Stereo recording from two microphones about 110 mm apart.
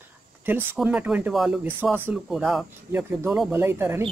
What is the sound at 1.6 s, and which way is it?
Speech, 15° right (ahead or behind).